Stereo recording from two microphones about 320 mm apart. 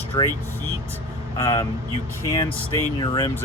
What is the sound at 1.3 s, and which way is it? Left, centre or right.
Speech, centre.